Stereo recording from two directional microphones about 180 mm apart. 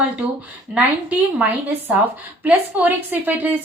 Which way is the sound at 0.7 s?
5° right (ahead or behind).